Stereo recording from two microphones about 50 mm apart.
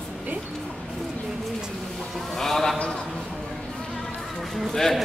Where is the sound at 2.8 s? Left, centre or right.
Centre.